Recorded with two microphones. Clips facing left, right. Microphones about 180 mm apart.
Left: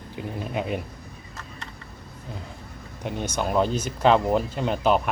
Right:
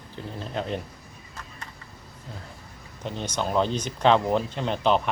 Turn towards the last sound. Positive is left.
turn(degrees=5)  # may be behind; listen again after turning